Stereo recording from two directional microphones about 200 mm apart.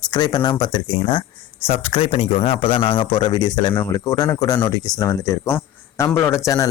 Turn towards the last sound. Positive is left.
turn(degrees=15)  # may be behind; listen again after turning